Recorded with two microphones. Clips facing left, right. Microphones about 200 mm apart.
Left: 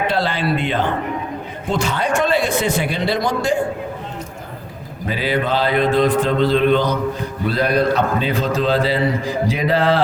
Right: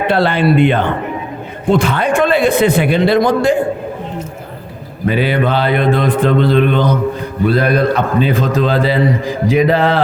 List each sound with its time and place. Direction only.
0.1 s a man's voice: 60° right (ahead or behind)
5.0 s a man's voice: 60° right (ahead or behind)